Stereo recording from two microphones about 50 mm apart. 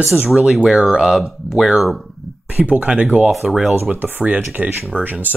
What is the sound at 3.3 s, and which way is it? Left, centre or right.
Speech, centre.